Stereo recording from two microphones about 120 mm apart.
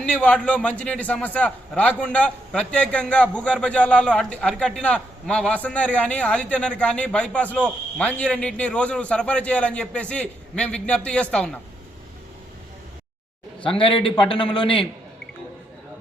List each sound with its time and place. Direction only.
0.0 s a man's voice: 10° left (ahead or behind)
13.6 s a man's voice: 45° left (ahead or behind)